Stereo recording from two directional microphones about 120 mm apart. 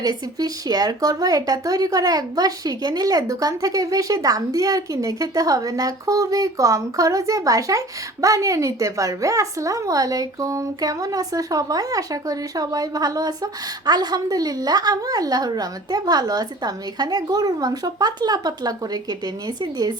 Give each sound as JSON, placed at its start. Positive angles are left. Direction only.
{"t": 0.0, "sound": "speech", "side_deg": -30}